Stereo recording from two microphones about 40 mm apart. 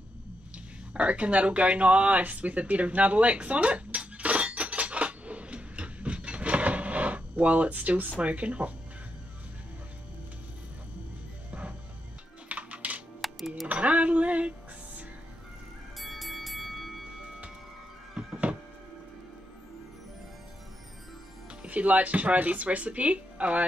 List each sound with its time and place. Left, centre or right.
0.9 s a sound: right
8.2 s speech: right
12.4 s music: right
13.2 s music: centre
13.7 s music: right
16.0 s music: centre
18.2 s a sound: right
21.6 s speech: right